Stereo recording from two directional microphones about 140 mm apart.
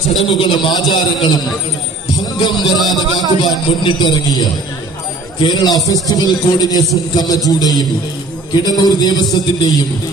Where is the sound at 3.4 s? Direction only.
30° left (ahead or behind).